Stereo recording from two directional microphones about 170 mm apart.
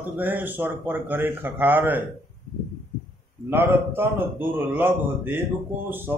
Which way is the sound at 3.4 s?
15° right (ahead or behind).